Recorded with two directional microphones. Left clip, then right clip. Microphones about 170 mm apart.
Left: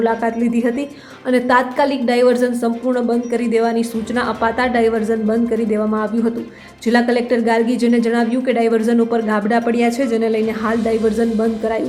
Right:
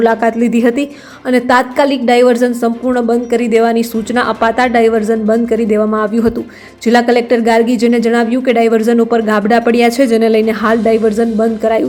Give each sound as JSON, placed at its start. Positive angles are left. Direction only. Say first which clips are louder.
{"t": 0.0, "sound": "a woman's voice", "louder": "right 6 dB", "side_deg": -20}